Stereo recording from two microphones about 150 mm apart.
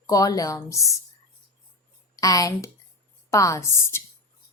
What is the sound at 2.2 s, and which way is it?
A woman's voice, 20° left (ahead or behind).